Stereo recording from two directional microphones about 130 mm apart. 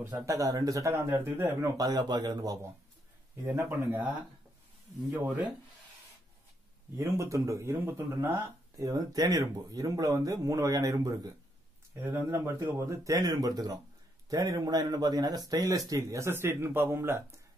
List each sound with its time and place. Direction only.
0.0 s speech: 25° right (ahead or behind)
1.8 s speech: 30° right (ahead or behind); by 4.1 s 15° right (ahead or behind)
5.1 s speech: 15° right (ahead or behind)
7.0 s speech: 25° right (ahead or behind)
11.9 s speech: 15° right (ahead or behind)